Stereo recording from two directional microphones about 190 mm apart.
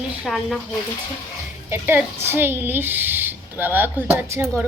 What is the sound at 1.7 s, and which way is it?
A woman's voice, 10° right (ahead or behind).